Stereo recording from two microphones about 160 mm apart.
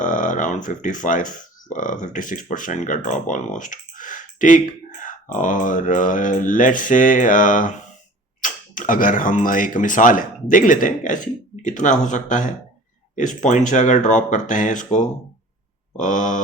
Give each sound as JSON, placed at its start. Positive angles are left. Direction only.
{"t": 0.0, "sound": "speech", "side_deg": 55}
{"t": 16.0, "sound": "speech", "side_deg": 55}